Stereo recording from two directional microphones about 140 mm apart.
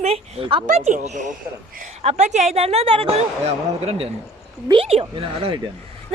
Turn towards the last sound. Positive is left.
turn(degrees=-40)  # may be behind; listen again after turning